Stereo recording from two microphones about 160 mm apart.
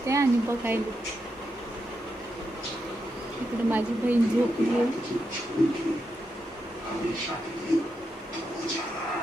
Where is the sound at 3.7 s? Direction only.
10° right (ahead or behind).